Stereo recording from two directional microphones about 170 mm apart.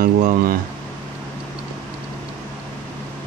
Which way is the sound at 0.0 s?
55° right (ahead or behind).